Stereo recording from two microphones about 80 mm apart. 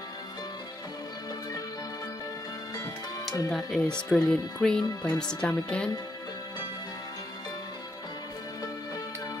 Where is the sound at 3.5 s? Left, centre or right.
Centre.